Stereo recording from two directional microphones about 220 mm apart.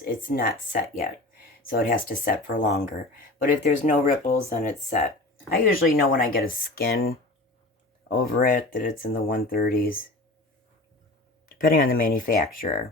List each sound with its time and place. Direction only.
0.0 s speech: 40° left (ahead or behind)
8.4 s speech: 40° left (ahead or behind)
11.5 s speech: 40° left (ahead or behind)